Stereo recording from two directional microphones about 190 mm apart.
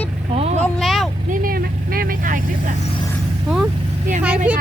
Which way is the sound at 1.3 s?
50° right (ahead or behind).